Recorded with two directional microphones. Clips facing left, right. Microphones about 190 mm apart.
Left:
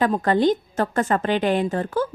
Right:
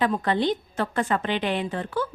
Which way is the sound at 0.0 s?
45° left (ahead or behind).